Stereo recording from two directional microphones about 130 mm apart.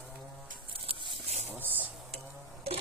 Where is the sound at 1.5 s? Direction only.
15° right (ahead or behind).